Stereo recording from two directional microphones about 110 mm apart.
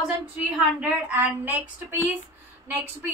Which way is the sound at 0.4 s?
15° right (ahead or behind).